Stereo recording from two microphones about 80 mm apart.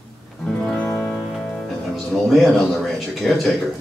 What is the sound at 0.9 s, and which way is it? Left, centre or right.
Music, left.